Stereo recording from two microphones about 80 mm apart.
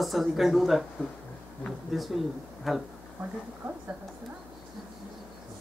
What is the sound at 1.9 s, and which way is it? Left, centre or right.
Speech, centre.